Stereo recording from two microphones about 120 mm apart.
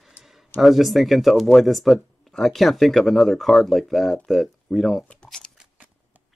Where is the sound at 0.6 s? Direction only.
Centre (ahead or behind).